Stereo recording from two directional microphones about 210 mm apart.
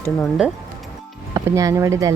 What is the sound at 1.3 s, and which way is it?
Speech, 15° right (ahead or behind).